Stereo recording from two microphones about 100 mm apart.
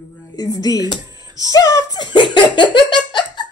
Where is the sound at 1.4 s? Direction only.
35° left (ahead or behind).